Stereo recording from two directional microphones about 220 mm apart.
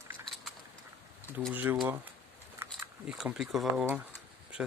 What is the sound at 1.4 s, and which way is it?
Speech, 5° right (ahead or behind).